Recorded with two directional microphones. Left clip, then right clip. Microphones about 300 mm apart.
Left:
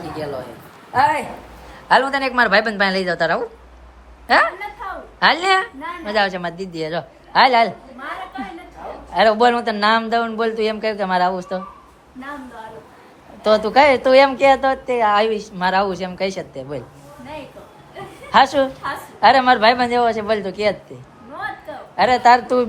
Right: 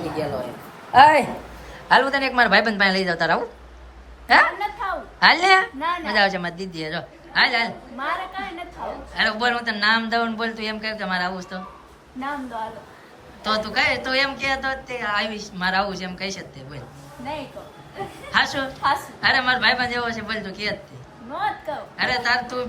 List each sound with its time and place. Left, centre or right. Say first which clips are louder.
0.9 s a woman's voice: right 4 dB; centre
1.9 s a woman's voice: left 2 dB; centre
9.1 s a woman's voice: left 8 dB; centre
13.4 s a woman's voice: left 8 dB; centre
18.3 s a woman's voice: left 8 dB; centre
21.9 s a woman's voice: left 9 dB; centre